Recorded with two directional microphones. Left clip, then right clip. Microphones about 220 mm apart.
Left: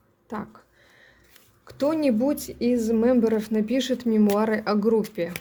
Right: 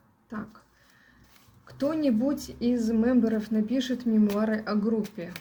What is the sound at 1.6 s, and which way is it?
A woman's voice, 45° left (ahead or behind).